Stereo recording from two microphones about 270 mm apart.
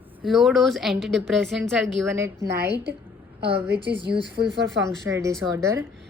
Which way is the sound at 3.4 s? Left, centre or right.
Right.